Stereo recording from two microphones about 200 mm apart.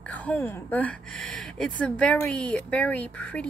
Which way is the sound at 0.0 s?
5° left (ahead or behind).